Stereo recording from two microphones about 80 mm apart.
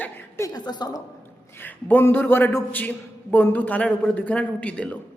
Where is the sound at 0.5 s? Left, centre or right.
Left.